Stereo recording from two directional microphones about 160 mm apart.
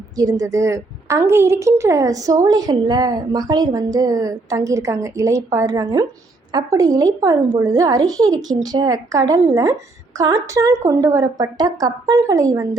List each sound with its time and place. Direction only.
0.2 s a woman's voice: 20° right (ahead or behind)